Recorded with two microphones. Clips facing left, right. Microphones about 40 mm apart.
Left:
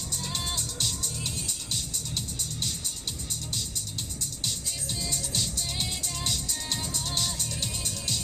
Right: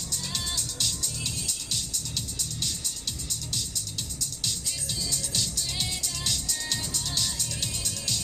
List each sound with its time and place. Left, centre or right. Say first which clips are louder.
0.1 s music: even; left
5.8 s music: even; left